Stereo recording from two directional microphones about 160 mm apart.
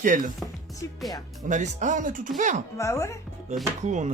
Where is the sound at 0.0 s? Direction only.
55° right (ahead or behind).